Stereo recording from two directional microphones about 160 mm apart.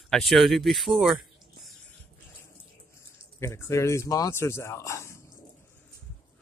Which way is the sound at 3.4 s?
15° left (ahead or behind).